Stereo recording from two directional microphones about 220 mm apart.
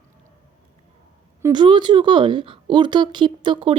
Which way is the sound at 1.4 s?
20° right (ahead or behind).